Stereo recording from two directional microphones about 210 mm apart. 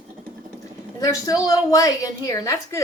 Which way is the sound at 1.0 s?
15° left (ahead or behind).